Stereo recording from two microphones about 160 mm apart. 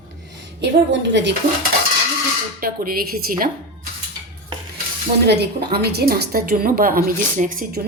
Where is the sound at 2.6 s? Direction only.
65° right (ahead or behind).